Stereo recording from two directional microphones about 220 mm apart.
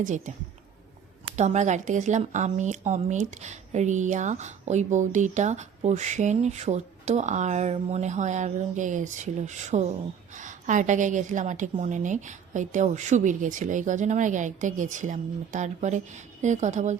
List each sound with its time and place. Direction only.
0.0 s speech: 35° right (ahead or behind)
1.4 s speech: 30° right (ahead or behind)